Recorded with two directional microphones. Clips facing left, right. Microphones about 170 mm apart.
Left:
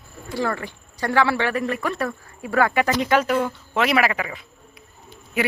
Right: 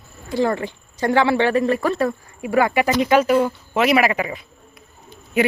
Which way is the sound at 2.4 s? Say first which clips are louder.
Right 2 dB; 15° right (ahead or behind).